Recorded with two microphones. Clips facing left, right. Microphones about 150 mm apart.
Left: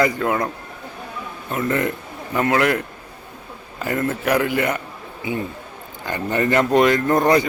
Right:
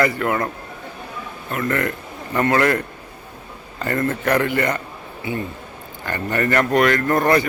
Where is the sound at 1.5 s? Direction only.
20° left (ahead or behind).